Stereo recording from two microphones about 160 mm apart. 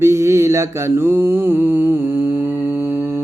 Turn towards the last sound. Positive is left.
turn(degrees=-15)  # may be behind; listen again after turning